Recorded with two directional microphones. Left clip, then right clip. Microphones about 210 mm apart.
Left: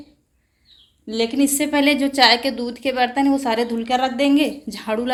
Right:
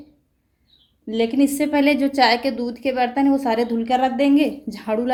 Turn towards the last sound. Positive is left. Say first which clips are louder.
# right 1 dB
turn(degrees=-10)  # may be behind; listen again after turning